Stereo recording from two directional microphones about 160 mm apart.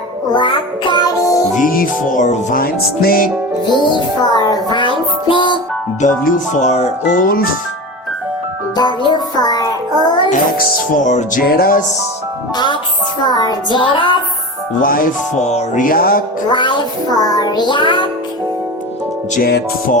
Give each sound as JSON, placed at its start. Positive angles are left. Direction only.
{"t": 0.3, "sound": "music", "side_deg": 30}
{"t": 1.6, "sound": "music", "side_deg": 60}
{"t": 3.7, "sound": "music", "side_deg": 30}
{"t": 6.0, "sound": "music", "side_deg": 55}
{"t": 9.1, "sound": "music", "side_deg": 25}
{"t": 10.9, "sound": "music", "side_deg": 50}
{"t": 11.4, "sound": "music", "side_deg": 70}
{"t": 13.2, "sound": "music", "side_deg": 25}
{"t": 14.8, "sound": "music", "side_deg": 60}
{"t": 15.4, "sound": "music", "side_deg": 45}
{"t": 16.5, "sound": "music", "side_deg": 30}
{"t": 19.4, "sound": "music", "side_deg": 80}